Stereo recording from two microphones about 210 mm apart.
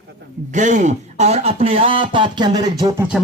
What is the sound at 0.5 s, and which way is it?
Speech, 35° right (ahead or behind).